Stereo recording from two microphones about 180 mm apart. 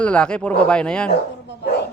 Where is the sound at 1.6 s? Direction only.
65° left (ahead or behind).